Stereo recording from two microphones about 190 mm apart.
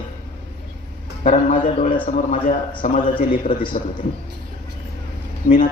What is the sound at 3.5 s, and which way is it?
Speech, 25° left (ahead or behind).